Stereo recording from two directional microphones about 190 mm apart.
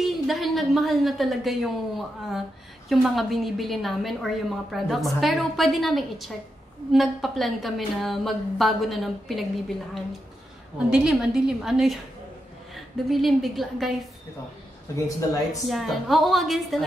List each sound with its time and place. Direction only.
0.0 s a woman's voice: centre (ahead or behind)
10.9 s a woman's voice: 5° right (ahead or behind)
15.0 s speech: 15° left (ahead or behind)
15.7 s a woman's voice: centre (ahead or behind)